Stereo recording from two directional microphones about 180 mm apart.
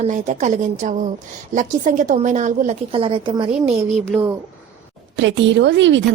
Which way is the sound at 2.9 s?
30° right (ahead or behind).